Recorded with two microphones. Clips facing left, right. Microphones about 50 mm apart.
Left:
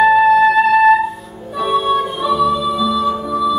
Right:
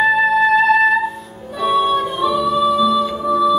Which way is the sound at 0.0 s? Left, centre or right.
Centre.